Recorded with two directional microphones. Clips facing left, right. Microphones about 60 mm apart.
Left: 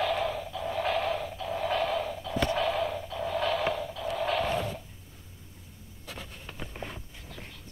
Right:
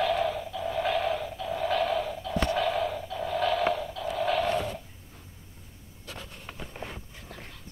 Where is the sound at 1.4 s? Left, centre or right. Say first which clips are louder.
Right 2 dB; centre.